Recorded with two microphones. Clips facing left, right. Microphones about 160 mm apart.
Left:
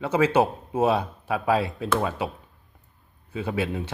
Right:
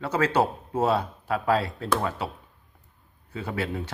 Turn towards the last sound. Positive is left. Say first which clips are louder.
# left 3 dB
turn(degrees=15)  # may be behind; listen again after turning